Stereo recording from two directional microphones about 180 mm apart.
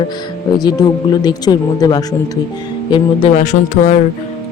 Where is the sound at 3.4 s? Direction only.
40° left (ahead or behind).